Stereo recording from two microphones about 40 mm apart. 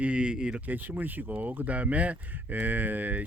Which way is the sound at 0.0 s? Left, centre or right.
Right.